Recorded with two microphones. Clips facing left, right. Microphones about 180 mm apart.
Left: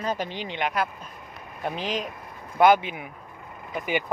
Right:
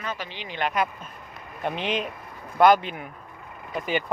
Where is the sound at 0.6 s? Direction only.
5° left (ahead or behind).